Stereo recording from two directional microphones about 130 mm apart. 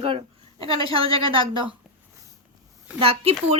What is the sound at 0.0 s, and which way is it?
A child's voice, 45° right (ahead or behind).